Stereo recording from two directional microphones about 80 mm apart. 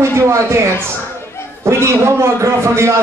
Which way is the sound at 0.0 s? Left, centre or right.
Right.